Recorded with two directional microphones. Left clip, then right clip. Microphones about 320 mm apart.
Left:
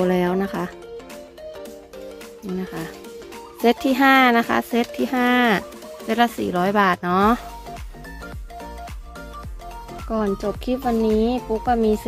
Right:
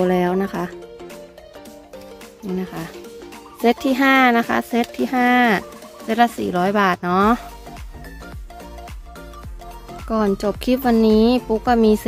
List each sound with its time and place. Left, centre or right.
0.0 s speech: centre
2.6 s speech: centre
10.0 s speech: centre